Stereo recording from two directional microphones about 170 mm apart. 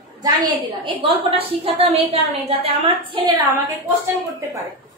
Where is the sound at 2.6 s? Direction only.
30° right (ahead or behind).